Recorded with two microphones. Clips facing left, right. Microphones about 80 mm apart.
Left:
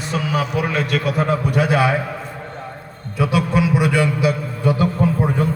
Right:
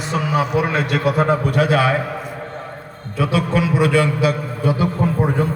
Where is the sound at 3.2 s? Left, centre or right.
Centre.